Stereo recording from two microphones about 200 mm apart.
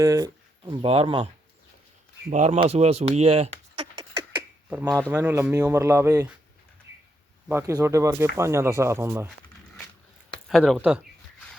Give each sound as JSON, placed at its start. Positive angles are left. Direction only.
{"t": 0.0, "sound": "speech", "side_deg": -15}
{"t": 2.3, "sound": "a sound", "side_deg": -30}
{"t": 5.0, "sound": "speech", "side_deg": -10}
{"t": 7.4, "sound": "speech", "side_deg": -15}
{"t": 10.5, "sound": "speech", "side_deg": 0}